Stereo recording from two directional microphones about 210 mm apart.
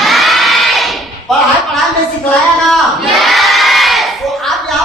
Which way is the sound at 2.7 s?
Centre (ahead or behind).